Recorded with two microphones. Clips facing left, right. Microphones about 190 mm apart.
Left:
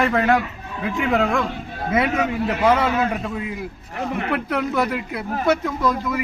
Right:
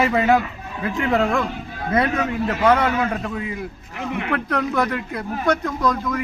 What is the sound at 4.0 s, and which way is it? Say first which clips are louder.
Speech: left 1 dB; 35° left (ahead or behind).